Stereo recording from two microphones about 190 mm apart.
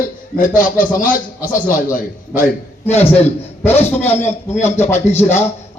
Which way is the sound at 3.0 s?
30° left (ahead or behind).